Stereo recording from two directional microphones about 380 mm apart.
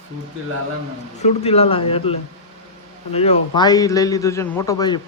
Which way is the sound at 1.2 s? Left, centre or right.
Centre.